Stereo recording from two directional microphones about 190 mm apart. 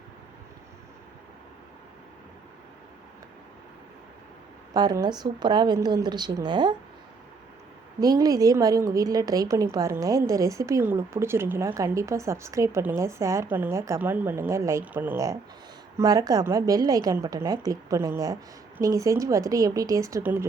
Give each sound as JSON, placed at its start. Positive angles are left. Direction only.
{"t": 4.7, "sound": "a woman's voice", "side_deg": -20}
{"t": 8.0, "sound": "a woman's voice", "side_deg": -20}